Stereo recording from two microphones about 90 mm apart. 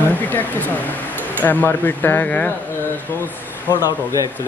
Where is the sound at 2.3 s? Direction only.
15° left (ahead or behind).